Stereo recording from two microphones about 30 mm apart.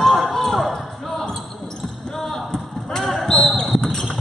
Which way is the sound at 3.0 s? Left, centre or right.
Centre.